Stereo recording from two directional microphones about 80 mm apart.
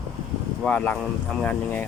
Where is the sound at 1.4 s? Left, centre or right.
Left.